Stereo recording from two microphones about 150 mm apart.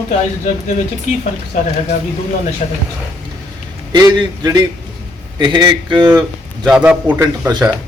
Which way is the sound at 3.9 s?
25° right (ahead or behind).